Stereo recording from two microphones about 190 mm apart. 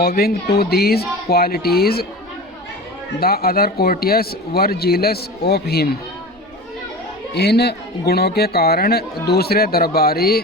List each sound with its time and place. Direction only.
0.0 s a man's voice: 55° left (ahead or behind)
3.2 s speech: 55° left (ahead or behind)
7.3 s a man's voice: 60° left (ahead or behind)